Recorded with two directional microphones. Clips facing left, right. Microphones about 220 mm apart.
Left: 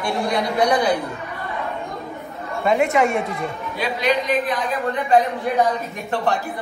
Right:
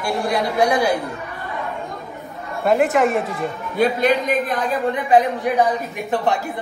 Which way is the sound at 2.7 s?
Centre (ahead or behind).